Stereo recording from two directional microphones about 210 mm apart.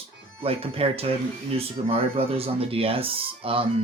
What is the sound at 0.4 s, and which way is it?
Speech, 25° right (ahead or behind).